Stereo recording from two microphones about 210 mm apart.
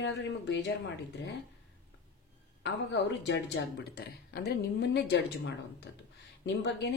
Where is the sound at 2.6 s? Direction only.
60° left (ahead or behind).